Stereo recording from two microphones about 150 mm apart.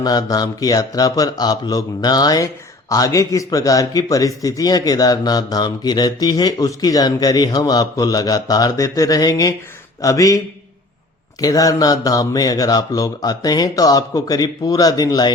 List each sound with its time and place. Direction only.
0.0 s speech: 25° left (ahead or behind)
11.3 s speech: 25° left (ahead or behind)